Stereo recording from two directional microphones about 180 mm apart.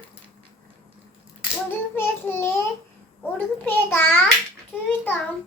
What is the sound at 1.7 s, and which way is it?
Child singing, 10° left (ahead or behind).